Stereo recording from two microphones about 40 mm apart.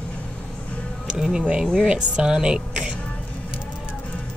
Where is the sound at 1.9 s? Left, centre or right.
Centre.